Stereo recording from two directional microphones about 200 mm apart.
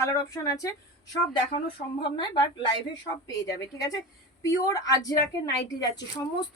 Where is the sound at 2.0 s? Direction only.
25° left (ahead or behind).